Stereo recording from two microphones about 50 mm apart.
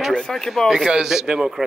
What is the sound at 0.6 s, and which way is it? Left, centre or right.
Speech, centre.